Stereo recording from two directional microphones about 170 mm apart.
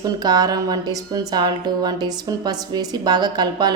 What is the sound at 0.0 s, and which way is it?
A woman's voice, 25° right (ahead or behind).